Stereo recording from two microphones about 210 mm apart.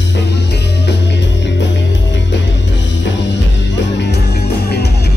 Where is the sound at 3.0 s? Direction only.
60° left (ahead or behind).